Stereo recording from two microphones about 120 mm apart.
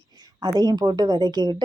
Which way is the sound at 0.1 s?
35° right (ahead or behind).